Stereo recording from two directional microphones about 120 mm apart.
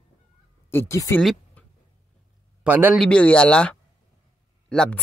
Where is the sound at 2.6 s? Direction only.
15° right (ahead or behind).